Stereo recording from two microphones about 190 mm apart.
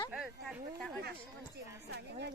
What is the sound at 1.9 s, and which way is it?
Speech, 60° right (ahead or behind).